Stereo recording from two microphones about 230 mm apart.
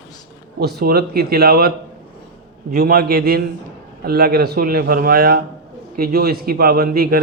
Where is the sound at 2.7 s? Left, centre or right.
Right.